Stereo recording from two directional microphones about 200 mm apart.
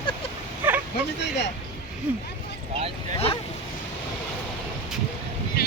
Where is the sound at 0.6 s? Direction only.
10° right (ahead or behind).